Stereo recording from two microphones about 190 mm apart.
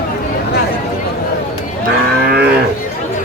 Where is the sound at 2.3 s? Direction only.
55° right (ahead or behind).